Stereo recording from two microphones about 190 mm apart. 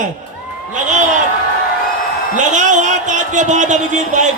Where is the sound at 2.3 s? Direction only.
40° right (ahead or behind).